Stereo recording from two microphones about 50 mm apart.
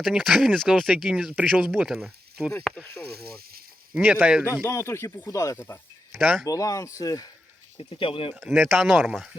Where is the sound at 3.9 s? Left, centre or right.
Right.